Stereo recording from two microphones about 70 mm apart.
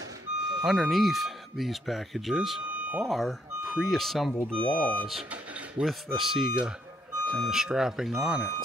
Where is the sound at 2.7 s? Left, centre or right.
Right.